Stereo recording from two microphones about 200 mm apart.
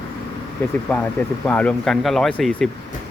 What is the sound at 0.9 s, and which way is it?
Speech, 10° left (ahead or behind).